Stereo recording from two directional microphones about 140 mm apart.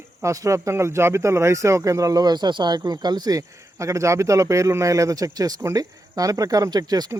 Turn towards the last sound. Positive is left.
turn(degrees=-25)  # may be behind; listen again after turning